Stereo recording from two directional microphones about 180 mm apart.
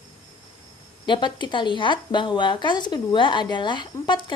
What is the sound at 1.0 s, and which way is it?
A woman's voice, 25° left (ahead or behind).